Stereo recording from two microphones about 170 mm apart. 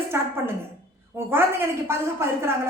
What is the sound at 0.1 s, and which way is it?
A woman's voice, 15° right (ahead or behind).